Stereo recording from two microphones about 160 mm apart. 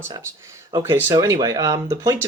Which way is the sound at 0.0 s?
15° right (ahead or behind).